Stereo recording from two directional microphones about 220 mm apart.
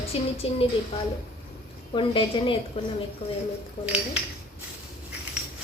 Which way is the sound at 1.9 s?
20° left (ahead or behind).